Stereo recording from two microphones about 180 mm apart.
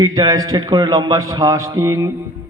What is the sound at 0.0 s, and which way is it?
A man's voice, 20° right (ahead or behind).